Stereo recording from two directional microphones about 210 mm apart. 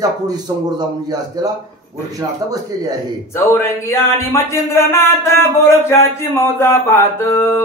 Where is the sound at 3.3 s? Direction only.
10° left (ahead or behind).